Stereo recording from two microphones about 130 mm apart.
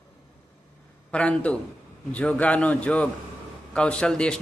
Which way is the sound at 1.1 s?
10° left (ahead or behind).